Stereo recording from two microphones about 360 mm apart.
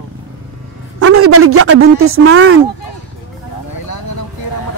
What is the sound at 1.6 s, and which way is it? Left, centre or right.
Speech, right.